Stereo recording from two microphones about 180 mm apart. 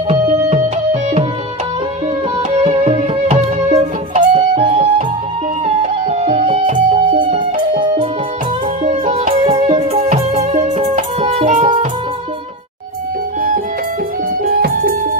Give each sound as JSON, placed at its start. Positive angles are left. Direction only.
{"t": 2.6, "sound": "music", "side_deg": -35}
{"t": 14.4, "sound": "music", "side_deg": -55}